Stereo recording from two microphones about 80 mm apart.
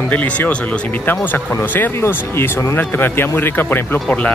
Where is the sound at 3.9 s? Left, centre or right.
Centre.